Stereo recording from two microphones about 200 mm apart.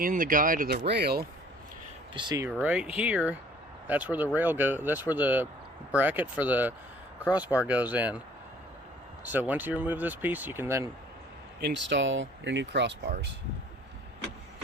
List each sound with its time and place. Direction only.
0.0 s speech: 40° right (ahead or behind)
2.1 s speech: 20° right (ahead or behind)
2.6 s speech: 5° right (ahead or behind)
9.2 s speech: 10° right (ahead or behind)
11.6 s speech: 60° right (ahead or behind)